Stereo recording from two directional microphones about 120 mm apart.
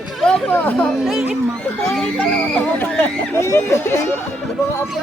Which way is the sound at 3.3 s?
20° left (ahead or behind).